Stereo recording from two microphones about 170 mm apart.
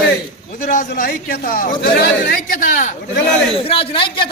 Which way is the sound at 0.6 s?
50° left (ahead or behind).